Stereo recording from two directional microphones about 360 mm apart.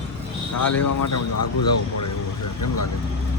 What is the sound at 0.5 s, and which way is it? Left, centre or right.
Speech, left.